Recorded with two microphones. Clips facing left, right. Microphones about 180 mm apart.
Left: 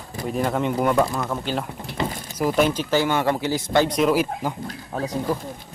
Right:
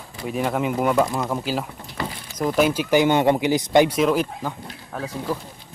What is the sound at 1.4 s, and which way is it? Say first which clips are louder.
Speech: right 1 dB; 5° right (ahead or behind).